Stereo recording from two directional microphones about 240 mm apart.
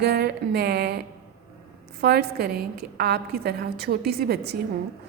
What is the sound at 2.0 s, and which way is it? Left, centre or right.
A woman's voice, right.